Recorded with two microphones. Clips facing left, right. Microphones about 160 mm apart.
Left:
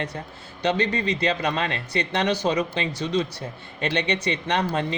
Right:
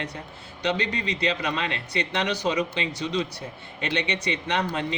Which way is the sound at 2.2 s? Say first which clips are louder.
Left 4 dB; 35° left (ahead or behind).